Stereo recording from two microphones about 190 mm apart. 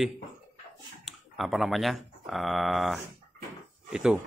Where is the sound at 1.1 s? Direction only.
Centre (ahead or behind).